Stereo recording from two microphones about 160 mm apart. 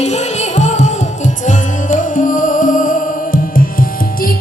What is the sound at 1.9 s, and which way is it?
Music, 55° left (ahead or behind).